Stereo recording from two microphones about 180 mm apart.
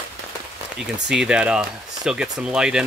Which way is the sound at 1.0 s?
5° right (ahead or behind).